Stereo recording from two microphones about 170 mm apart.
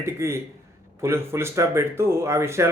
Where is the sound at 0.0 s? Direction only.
15° right (ahead or behind).